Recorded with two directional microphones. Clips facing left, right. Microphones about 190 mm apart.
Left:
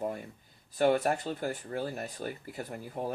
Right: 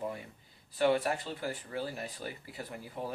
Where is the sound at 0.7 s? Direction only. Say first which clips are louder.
Left 2 dB; 45° left (ahead or behind).